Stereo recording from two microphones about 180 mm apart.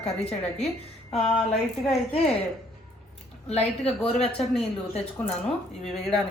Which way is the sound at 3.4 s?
35° left (ahead or behind).